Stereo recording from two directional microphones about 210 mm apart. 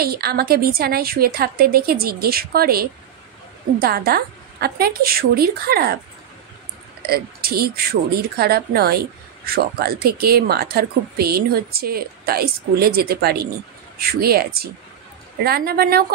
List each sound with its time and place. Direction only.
0.0 s a woman's voice: 45° right (ahead or behind)
7.1 s a woman's voice: 45° right (ahead or behind)